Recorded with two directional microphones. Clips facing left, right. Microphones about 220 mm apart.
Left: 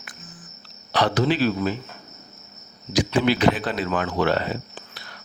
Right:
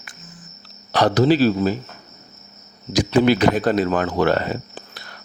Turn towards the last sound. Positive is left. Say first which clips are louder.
# right 3 dB
turn(degrees=-45)  # may be behind; listen again after turning